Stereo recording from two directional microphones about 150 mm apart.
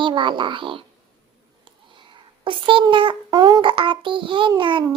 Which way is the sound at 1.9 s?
30° right (ahead or behind).